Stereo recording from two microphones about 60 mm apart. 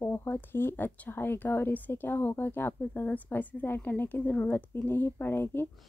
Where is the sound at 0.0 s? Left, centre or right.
Left.